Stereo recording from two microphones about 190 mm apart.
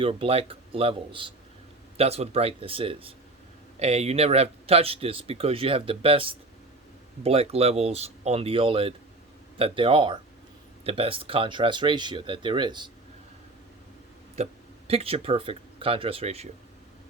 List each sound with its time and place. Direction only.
0.0 s speech: 30° right (ahead or behind)
14.4 s speech: 35° right (ahead or behind)